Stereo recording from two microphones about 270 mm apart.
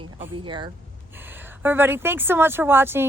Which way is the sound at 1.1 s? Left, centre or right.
Centre.